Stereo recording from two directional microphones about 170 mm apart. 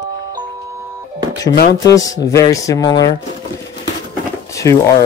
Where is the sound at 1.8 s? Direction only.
20° left (ahead or behind).